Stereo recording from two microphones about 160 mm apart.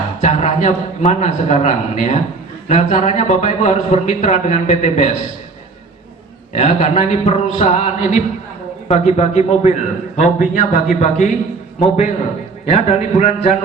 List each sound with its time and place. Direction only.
0.2 s a man's voice: 45° left (ahead or behind)
6.5 s a man's voice: 50° left (ahead or behind)